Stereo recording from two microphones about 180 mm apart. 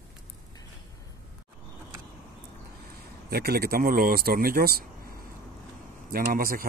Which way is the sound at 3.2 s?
60° right (ahead or behind).